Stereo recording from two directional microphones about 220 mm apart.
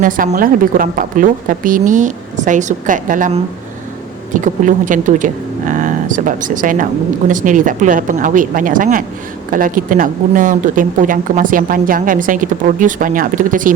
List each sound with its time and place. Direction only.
0.0 s speech: 40° right (ahead or behind)